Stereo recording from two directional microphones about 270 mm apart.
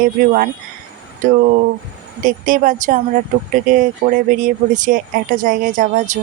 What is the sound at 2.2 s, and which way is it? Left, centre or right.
Speech, right.